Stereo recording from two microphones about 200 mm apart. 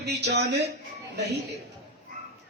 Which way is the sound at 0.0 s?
55° right (ahead or behind).